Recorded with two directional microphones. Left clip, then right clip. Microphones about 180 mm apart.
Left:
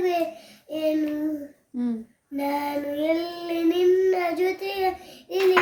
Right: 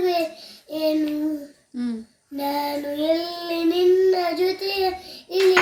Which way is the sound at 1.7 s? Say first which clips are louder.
Even; 15° left (ahead or behind).